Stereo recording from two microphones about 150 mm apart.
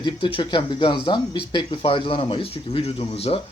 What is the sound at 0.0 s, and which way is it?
Speech, 35° left (ahead or behind).